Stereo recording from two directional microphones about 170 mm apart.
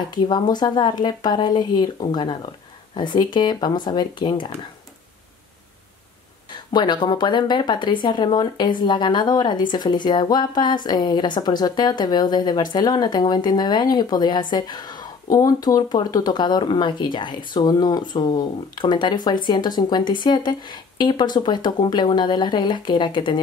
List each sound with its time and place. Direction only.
0.3 s speech: 25° left (ahead or behind)
6.7 s speech: 25° left (ahead or behind)